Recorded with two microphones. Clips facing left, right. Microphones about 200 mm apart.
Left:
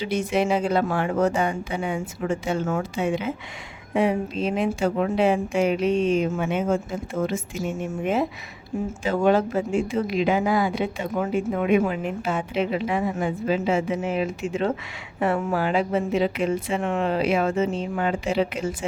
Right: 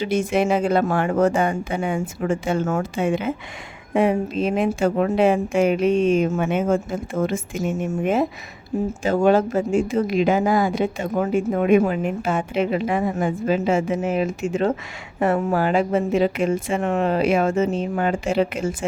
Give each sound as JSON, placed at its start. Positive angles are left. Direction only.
{"t": 0.0, "sound": "speech", "side_deg": -50}